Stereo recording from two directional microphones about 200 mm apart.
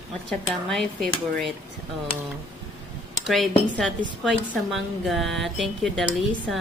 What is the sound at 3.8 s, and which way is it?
A woman's voice, centre (ahead or behind).